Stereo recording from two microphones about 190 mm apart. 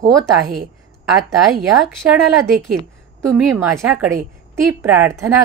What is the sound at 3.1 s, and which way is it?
A woman's voice, 10° right (ahead or behind).